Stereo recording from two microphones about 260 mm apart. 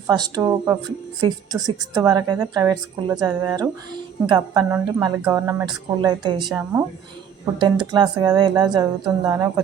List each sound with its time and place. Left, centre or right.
0.1 s speech: centre
7.6 s speech: centre